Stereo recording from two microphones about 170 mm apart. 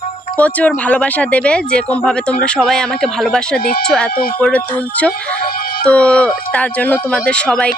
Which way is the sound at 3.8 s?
5° left (ahead or behind).